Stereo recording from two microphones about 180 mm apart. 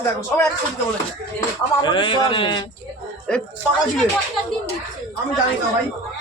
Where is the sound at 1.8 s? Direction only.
25° left (ahead or behind).